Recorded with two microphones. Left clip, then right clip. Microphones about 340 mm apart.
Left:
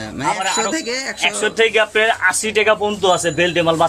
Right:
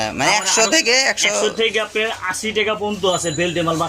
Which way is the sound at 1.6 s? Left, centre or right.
Left.